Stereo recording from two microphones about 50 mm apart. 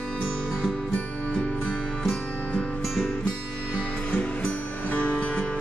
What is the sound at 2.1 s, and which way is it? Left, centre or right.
Music, left.